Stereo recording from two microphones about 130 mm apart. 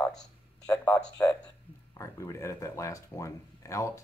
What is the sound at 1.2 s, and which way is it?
Speech, 15° left (ahead or behind).